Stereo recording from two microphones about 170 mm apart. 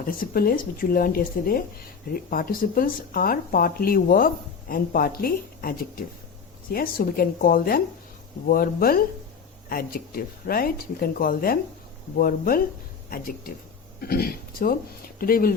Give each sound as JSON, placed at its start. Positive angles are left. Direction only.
{"t": 0.0, "sound": "speech", "side_deg": 60}